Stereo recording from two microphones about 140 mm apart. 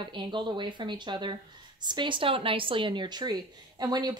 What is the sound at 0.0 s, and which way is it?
Speech, 35° right (ahead or behind).